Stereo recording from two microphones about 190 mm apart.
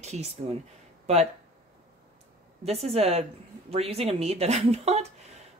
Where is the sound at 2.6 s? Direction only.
30° right (ahead or behind).